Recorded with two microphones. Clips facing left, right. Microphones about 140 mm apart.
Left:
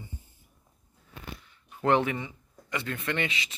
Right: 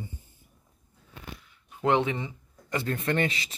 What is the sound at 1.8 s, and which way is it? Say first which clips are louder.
Speech: even; 15° right (ahead or behind).